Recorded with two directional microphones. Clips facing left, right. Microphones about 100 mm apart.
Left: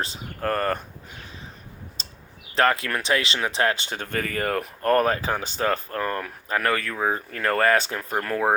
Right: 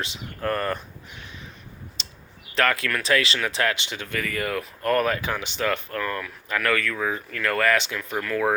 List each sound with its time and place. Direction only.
0.0 s speech: 40° left (ahead or behind)
2.0 s clicking: 35° left (ahead or behind)
2.6 s speech: 30° left (ahead or behind)
3.8 s speech: 45° left (ahead or behind)